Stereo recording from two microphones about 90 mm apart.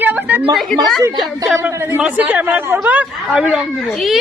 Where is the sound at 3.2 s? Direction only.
5° right (ahead or behind).